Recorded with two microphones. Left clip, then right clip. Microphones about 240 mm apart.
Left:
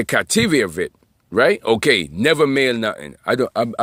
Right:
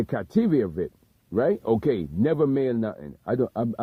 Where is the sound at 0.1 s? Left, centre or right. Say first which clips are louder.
Left 10 dB; left.